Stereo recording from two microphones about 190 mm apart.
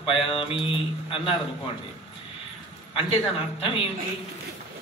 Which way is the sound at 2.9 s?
30° left (ahead or behind).